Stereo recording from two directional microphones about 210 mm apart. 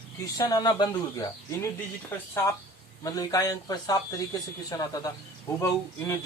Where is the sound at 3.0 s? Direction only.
15° left (ahead or behind).